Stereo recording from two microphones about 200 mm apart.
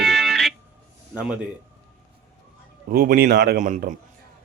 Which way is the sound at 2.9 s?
50° right (ahead or behind).